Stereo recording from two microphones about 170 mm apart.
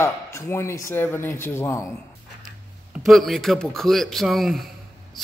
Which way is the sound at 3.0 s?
Centre (ahead or behind).